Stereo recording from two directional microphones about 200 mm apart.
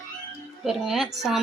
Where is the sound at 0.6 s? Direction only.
Centre (ahead or behind).